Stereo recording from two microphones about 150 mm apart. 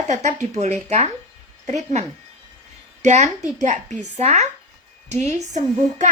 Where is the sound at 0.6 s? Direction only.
50° right (ahead or behind).